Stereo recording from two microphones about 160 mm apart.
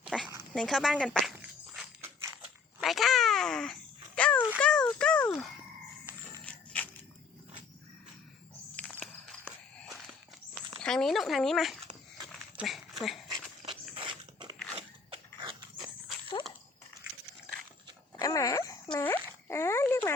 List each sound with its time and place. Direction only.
0.1 s dog: 5° right (ahead or behind)
0.5 s speech: 5° left (ahead or behind)
1.4 s walk: 5° right (ahead or behind)
2.8 s babbling: centre (ahead or behind)
6.8 s biting: 10° left (ahead or behind)
8.7 s a sound: 10° left (ahead or behind)
10.8 s speech: 5° left (ahead or behind)
12.5 s dog: centre (ahead or behind)
13.9 s biting: 30° right (ahead or behind)
14.8 s crunch: 35° right (ahead or behind)
18.2 s a sound: 20° left (ahead or behind)